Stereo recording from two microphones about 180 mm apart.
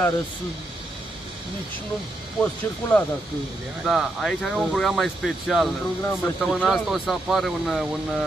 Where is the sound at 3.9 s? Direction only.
Centre (ahead or behind).